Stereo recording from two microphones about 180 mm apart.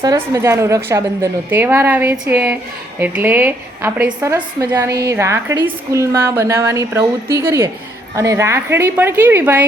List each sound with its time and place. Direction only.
0.0 s a woman's voice: 15° right (ahead or behind)